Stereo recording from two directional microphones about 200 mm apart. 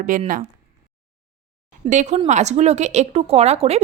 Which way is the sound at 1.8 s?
35° right (ahead or behind).